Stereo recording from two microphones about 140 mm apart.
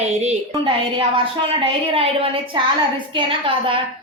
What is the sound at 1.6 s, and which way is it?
A woman's voice, 40° right (ahead or behind).